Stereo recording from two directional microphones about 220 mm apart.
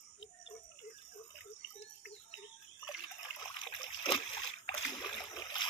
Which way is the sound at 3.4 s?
20° left (ahead or behind).